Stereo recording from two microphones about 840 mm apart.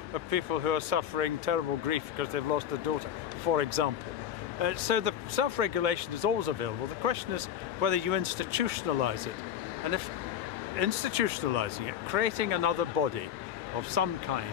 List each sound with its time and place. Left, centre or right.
0.1 s speech: right
4.6 s speech: right
10.8 s speech: right